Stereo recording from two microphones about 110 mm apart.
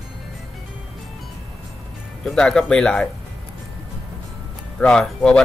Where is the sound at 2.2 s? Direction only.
5° left (ahead or behind).